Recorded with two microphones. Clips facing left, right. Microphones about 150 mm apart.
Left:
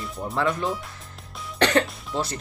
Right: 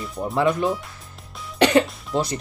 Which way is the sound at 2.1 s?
15° right (ahead or behind).